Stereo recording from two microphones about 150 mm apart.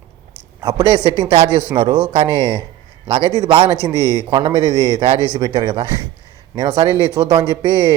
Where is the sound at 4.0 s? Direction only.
30° right (ahead or behind).